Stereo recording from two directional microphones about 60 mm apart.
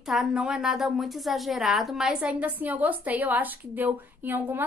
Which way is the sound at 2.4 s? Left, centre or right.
Right.